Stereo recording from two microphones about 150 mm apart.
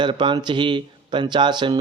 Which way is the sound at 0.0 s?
30° right (ahead or behind).